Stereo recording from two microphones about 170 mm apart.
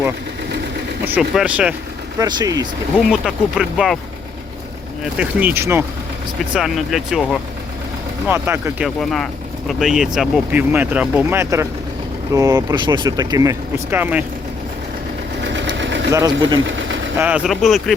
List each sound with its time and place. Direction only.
1.0 s speech: 5° right (ahead or behind)
2.1 s speech: 20° right (ahead or behind)
3.1 s speech: centre (ahead or behind)
5.1 s speech: 10° right (ahead or behind)
6.6 s speech: centre (ahead or behind)
8.3 s speech: 15° right (ahead or behind)
8.8 s speech: centre (ahead or behind)
15.4 s sewing machine: 90° right
16.1 s speech: 20° right (ahead or behind)
16.6 s vehicle: 90° right
17.2 s speech: 10° right (ahead or behind)